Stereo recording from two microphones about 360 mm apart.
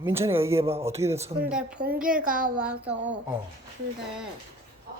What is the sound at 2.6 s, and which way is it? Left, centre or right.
Speech, centre.